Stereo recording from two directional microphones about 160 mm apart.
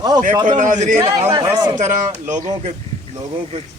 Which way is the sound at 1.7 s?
50° right (ahead or behind).